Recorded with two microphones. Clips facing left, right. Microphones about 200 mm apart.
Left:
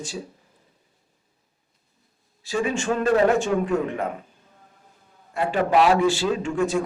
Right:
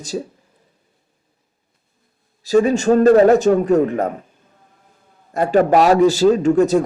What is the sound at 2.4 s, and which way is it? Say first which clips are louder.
A man's voice: right 10 dB; 40° right (ahead or behind).